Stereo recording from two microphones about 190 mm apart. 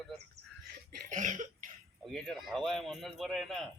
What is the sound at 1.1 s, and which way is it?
Cough, 40° right (ahead or behind).